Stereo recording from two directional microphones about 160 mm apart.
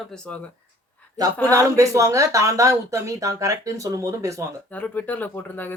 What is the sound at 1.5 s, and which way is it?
Speech, 20° right (ahead or behind).